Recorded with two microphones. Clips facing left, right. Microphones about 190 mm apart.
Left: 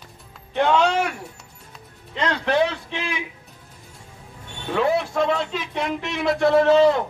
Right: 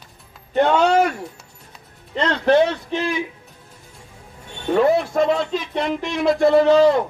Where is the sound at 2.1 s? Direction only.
45° right (ahead or behind).